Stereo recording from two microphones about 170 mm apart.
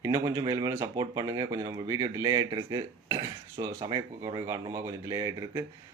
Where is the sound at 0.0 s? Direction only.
20° right (ahead or behind).